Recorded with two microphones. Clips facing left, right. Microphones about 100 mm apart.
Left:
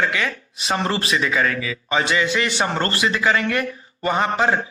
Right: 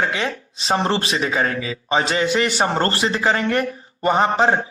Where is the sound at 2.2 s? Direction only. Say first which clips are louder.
Right 3 dB; 50° right (ahead or behind).